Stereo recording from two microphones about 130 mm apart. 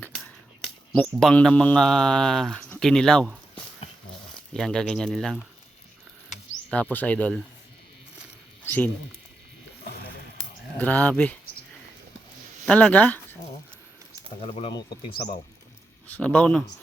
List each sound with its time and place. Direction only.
0.1 s whispering: centre (ahead or behind)
1.2 s speech: 5° left (ahead or behind)
4.5 s speech: 5° left (ahead or behind)
6.7 s speech: 10° left (ahead or behind)
8.6 s speech: 15° left (ahead or behind)
10.8 s speech: 15° left (ahead or behind)
12.6 s speech: 10° left (ahead or behind)
14.3 s speech: 50° left (ahead or behind)
14.7 s speech: 35° left (ahead or behind)
16.1 s speech: 10° left (ahead or behind)